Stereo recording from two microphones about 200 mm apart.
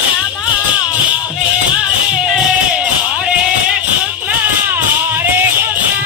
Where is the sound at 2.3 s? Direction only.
5° right (ahead or behind).